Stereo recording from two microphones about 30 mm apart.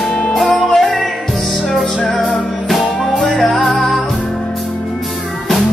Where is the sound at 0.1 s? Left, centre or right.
Left.